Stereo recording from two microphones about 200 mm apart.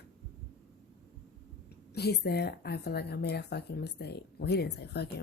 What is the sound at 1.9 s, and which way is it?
Speech, 50° left (ahead or behind).